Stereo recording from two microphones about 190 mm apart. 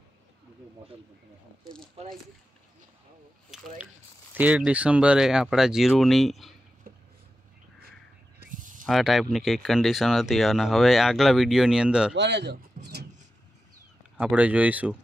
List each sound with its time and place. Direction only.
2.0 s speech: 30° right (ahead or behind)
3.4 s speech: 5° right (ahead or behind)
8.4 s a sound: 45° right (ahead or behind)
8.8 s speech: centre (ahead or behind)
12.2 s speech: 65° right (ahead or behind)
14.1 s speech: 5° right (ahead or behind)